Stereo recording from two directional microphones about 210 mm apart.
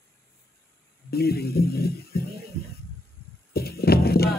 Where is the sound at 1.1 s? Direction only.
50° left (ahead or behind).